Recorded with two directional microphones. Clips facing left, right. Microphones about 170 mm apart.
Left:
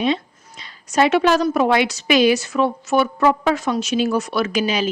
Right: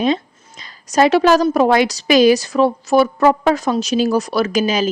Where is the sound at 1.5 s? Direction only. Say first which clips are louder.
Right 3 dB; 40° right (ahead or behind).